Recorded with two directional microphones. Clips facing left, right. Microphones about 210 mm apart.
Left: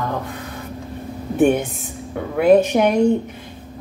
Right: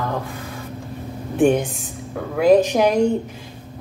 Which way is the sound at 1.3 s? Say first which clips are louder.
Even; 5° left (ahead or behind).